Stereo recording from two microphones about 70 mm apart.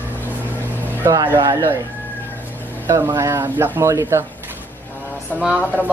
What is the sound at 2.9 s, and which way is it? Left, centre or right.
Speech, right.